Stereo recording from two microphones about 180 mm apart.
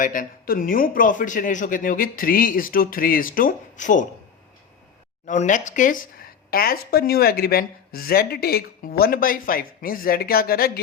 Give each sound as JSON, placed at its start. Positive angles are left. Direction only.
{"t": 0.0, "sound": "speech", "side_deg": 50}
{"t": 5.2, "sound": "speech", "side_deg": 45}